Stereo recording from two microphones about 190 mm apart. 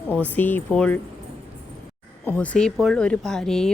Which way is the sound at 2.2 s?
10° left (ahead or behind).